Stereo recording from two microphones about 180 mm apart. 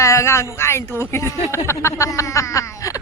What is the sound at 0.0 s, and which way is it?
Speech, 15° left (ahead or behind).